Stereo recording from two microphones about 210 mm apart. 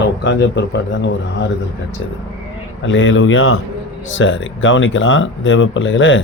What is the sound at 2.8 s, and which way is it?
A man's voice, 65° left (ahead or behind).